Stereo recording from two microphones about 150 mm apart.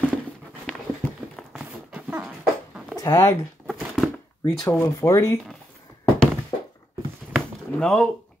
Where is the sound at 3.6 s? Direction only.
Centre (ahead or behind).